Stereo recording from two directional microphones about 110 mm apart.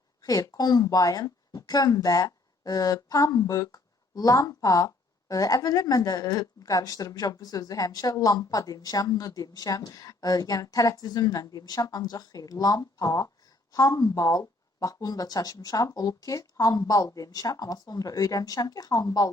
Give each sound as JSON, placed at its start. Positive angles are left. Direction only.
{"t": 0.2, "sound": "speech", "side_deg": 35}